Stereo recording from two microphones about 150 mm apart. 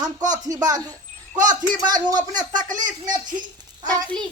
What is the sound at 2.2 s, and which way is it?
Speech, 60° right (ahead or behind).